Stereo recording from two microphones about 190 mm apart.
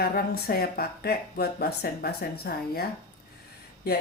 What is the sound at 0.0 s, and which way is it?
Speech, 50° left (ahead or behind).